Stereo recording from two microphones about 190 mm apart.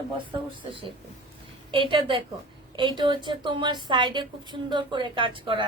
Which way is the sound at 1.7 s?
25° right (ahead or behind).